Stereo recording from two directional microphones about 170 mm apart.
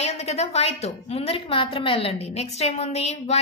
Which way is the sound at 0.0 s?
40° left (ahead or behind).